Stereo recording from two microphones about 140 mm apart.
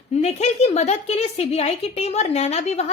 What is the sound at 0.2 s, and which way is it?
A woman's voice, 50° left (ahead or behind).